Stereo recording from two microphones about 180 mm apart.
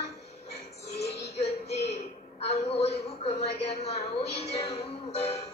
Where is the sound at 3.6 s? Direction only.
35° left (ahead or behind).